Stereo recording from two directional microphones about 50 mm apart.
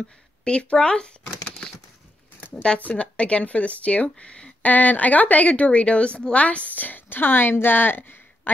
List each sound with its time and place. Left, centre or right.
0.5 s speech: centre
2.5 s speech: centre
4.7 s a woman's voice: left